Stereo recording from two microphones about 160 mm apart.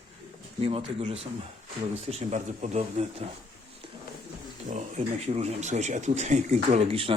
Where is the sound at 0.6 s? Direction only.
40° right (ahead or behind).